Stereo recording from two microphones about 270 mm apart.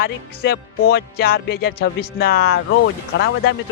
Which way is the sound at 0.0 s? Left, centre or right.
Left.